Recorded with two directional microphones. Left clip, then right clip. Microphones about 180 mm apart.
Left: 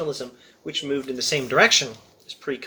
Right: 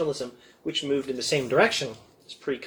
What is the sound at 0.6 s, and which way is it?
Speech, 20° left (ahead or behind).